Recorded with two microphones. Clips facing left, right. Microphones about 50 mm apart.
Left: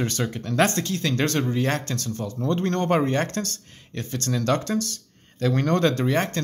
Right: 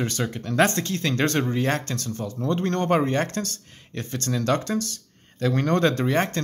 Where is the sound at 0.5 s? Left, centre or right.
Right.